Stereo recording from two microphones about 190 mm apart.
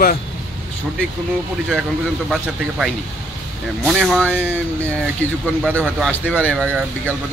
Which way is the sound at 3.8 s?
Centre (ahead or behind).